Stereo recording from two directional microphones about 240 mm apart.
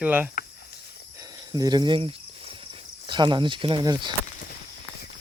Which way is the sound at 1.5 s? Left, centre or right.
Centre.